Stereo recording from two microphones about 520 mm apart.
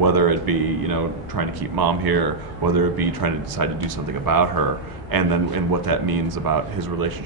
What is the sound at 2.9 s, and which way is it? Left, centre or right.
Speech, right.